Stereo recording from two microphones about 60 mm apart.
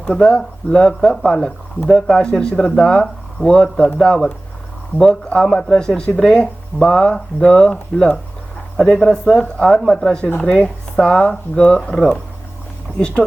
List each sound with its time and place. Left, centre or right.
0.1 s speech: centre
13.0 s speech: centre